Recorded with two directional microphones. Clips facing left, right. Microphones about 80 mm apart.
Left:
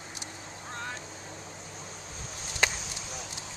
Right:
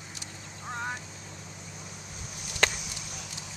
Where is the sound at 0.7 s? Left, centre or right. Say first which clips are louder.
Right 4 dB; centre.